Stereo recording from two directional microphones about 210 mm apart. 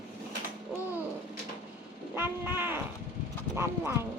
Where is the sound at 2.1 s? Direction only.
10° right (ahead or behind).